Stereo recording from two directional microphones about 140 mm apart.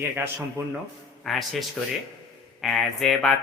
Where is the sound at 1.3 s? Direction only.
Centre (ahead or behind).